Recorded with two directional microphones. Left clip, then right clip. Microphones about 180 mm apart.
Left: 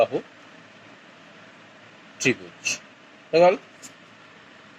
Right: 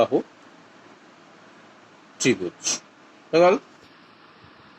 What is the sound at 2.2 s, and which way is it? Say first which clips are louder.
Speech: right 1 dB; 60° right (ahead or behind).